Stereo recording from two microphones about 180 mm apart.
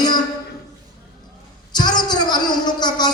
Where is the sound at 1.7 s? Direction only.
25° left (ahead or behind).